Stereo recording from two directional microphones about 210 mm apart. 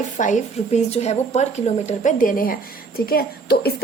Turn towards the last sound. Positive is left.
turn(degrees=45)  # may be behind; listen again after turning